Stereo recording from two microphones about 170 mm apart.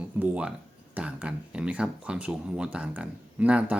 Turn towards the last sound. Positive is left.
turn(degrees=-5)  # may be behind; listen again after turning